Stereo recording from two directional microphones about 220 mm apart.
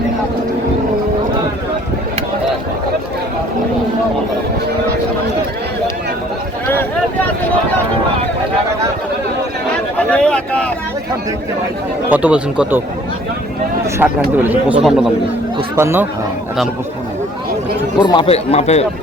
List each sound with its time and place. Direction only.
10.0 s a sound: 5° left (ahead or behind)
12.1 s speech: 5° right (ahead or behind)
14.0 s speech: 10° right (ahead or behind)
15.5 s speech: 10° right (ahead or behind)
18.0 s a man's voice: 20° left (ahead or behind)